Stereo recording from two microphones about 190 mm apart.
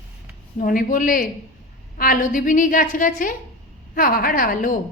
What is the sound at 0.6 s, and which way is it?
A woman's voice, 45° left (ahead or behind).